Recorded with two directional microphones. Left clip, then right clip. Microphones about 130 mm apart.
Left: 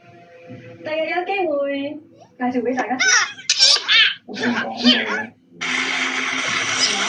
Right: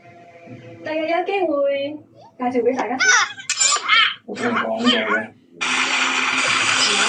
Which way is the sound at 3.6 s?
20° left (ahead or behind).